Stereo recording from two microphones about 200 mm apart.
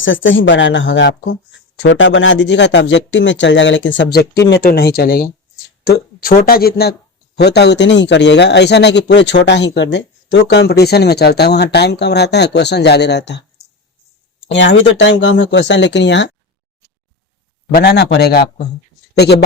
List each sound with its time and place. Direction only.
0.0 s speech: 70° left (ahead or behind)
4.6 s a man's voice: 50° left (ahead or behind)
14.5 s a man's voice: 65° left (ahead or behind)
17.7 s a man's voice: 55° left (ahead or behind)